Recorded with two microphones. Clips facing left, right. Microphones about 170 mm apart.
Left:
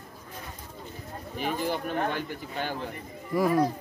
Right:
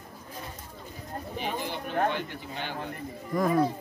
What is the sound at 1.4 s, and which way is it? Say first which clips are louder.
Speech: left 5 dB; 45° left (ahead or behind).